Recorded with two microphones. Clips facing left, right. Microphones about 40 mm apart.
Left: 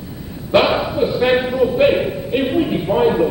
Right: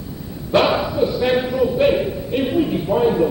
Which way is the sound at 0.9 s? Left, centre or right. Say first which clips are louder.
Left 2 dB; left.